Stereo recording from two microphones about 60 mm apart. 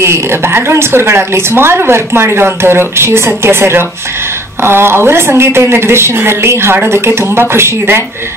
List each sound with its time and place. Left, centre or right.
0.0 s a woman's voice: right